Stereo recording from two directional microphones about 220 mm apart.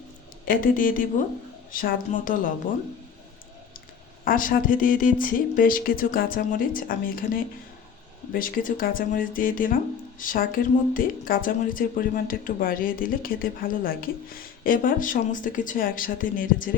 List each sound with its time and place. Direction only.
0.4 s speech: 40° left (ahead or behind)
4.3 s speech: 40° left (ahead or behind)